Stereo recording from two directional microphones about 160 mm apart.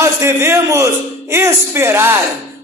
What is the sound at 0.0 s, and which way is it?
A man's voice, 15° right (ahead or behind).